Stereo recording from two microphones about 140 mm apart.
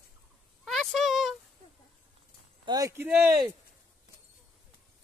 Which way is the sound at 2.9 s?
15° right (ahead or behind).